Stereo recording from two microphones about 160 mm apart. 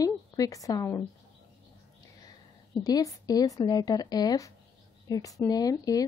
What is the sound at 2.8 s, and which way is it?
A woman's voice, 20° left (ahead or behind).